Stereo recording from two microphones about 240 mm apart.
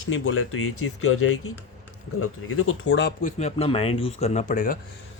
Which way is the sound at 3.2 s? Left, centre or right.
Left.